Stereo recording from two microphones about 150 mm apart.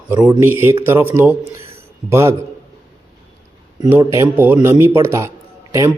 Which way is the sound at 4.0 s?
20° right (ahead or behind).